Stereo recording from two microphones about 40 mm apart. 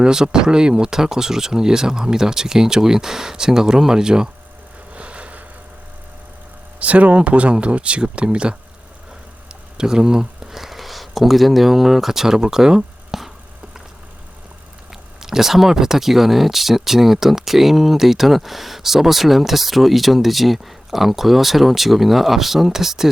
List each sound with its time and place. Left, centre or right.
0.0 s speech: centre
4.9 s vehicle: right
6.7 s speech: right
9.7 s speech: centre
15.2 s speech: centre